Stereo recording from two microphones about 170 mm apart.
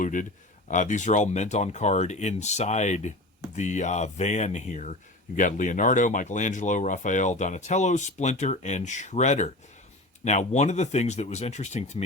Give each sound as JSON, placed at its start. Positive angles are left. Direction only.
{"t": 0.0, "sound": "speech", "side_deg": 50}